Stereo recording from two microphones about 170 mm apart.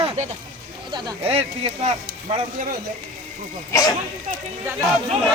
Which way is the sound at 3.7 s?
20° left (ahead or behind).